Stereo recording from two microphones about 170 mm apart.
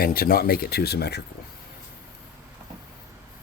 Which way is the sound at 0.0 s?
60° left (ahead or behind).